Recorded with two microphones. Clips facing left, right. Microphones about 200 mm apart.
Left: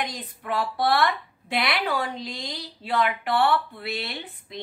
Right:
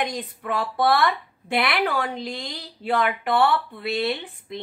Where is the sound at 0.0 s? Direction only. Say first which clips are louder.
Right 5 dB; 50° right (ahead or behind).